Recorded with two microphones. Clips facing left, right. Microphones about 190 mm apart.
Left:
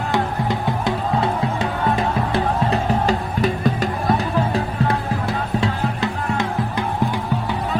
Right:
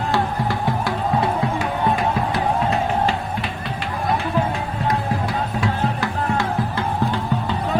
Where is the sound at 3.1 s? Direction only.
40° left (ahead or behind).